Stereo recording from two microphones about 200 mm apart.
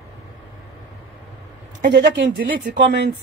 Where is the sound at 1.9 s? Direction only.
60° right (ahead or behind).